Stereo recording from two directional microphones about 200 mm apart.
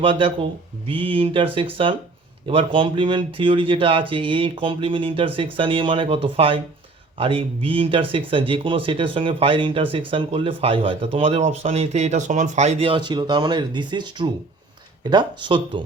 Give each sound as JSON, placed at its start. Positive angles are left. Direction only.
{"t": 0.0, "sound": "speech", "side_deg": -25}